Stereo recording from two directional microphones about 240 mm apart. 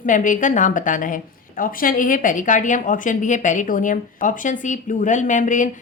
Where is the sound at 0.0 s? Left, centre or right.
Left.